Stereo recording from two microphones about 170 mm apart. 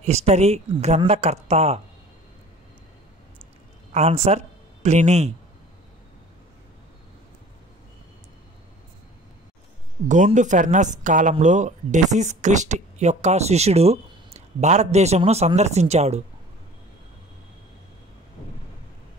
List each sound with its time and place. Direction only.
0.0 s speech: 40° right (ahead or behind)
3.9 s speech: 40° right (ahead or behind)
10.0 s speech: 45° right (ahead or behind)